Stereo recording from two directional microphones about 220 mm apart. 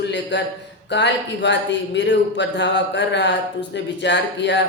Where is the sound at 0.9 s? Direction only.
50° left (ahead or behind).